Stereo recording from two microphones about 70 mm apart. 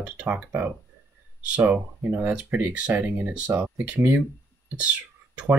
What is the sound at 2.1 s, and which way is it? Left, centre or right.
Speech, centre.